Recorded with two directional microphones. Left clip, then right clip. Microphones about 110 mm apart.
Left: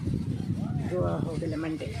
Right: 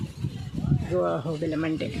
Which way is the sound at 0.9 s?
40° right (ahead or behind).